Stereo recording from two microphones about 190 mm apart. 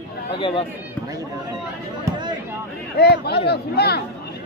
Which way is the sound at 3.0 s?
55° left (ahead or behind).